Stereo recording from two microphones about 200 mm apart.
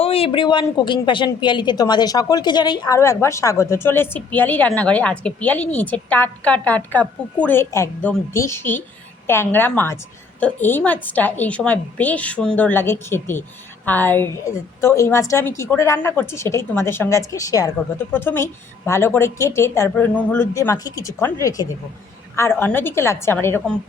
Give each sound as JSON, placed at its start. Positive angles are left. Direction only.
{"t": 0.0, "sound": "a woman's voice", "side_deg": 30}